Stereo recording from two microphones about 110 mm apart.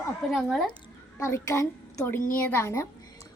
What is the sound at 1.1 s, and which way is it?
A child's voice, 25° left (ahead or behind).